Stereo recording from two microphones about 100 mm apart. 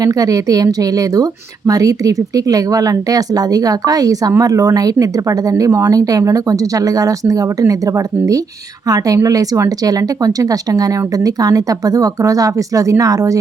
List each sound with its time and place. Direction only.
0.0 s a woman's voice: 35° right (ahead or behind)